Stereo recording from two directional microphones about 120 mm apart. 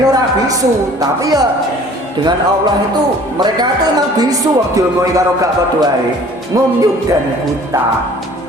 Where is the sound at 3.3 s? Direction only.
35° right (ahead or behind).